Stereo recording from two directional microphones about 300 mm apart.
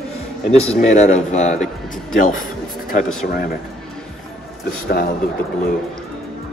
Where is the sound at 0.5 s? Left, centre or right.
Left.